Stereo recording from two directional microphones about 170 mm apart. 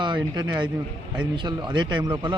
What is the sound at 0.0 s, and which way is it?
Speech, 25° right (ahead or behind).